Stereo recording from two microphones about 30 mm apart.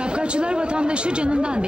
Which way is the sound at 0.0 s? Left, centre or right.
Right.